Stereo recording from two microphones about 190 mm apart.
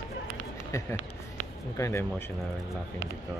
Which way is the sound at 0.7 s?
15° left (ahead or behind).